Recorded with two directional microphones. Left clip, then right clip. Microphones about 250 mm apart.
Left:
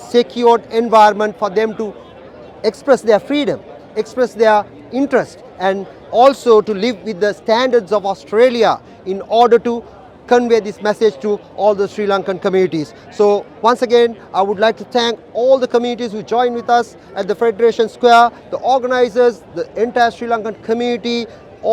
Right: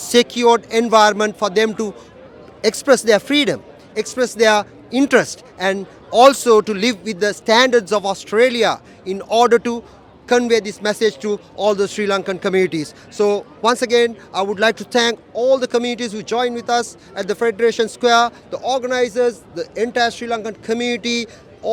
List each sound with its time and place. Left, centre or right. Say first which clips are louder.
0.0 s a man's voice: left 1 dB; right
6.1 s a man's voice: left 1 dB; right
8.4 s a man's voice: left 3 dB; centre